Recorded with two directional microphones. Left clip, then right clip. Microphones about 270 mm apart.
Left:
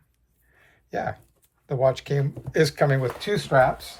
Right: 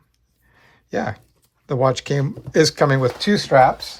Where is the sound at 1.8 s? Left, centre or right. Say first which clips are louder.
Right 3 dB; right.